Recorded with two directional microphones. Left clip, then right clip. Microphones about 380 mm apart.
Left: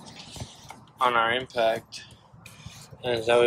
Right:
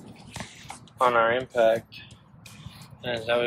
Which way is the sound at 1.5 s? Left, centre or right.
Centre.